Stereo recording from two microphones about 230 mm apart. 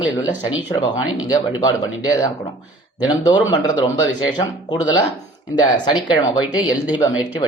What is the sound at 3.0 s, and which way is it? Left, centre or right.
Speech, centre.